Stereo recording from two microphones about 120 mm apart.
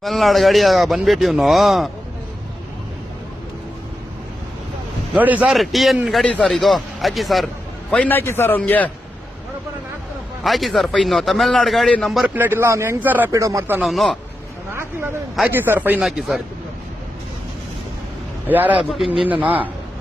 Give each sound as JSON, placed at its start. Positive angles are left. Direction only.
{"t": 0.0, "sound": "speech", "side_deg": 0}
{"t": 5.1, "sound": "speech", "side_deg": -15}
{"t": 5.5, "sound": "a man's voice", "side_deg": 0}
{"t": 7.9, "sound": "a man's voice", "side_deg": 15}
{"t": 10.4, "sound": "speech", "side_deg": 0}
{"t": 12.3, "sound": "speech", "side_deg": -15}
{"t": 13.3, "sound": "speech", "side_deg": -25}
{"t": 13.8, "sound": "speech", "side_deg": 0}
{"t": 15.4, "sound": "speech", "side_deg": -15}
{"t": 16.0, "sound": "speech", "side_deg": -5}
{"t": 18.4, "sound": "speech", "side_deg": -15}
{"t": 18.9, "sound": "speech", "side_deg": 0}